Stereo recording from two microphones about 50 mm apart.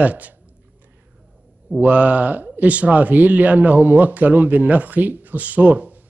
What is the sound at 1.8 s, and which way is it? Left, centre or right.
Speech, right.